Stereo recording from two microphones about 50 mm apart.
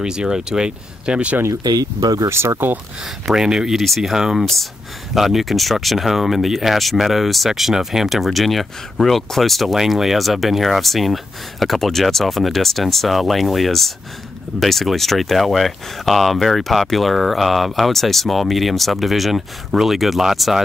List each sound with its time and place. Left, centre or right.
0.0 s speech: centre
2.2 s speech: right
3.3 s speech: centre
3.7 s speech: centre